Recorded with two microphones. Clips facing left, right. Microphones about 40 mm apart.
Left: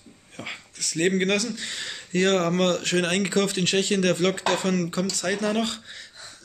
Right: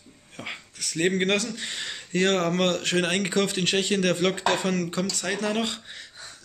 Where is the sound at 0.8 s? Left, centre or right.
Centre.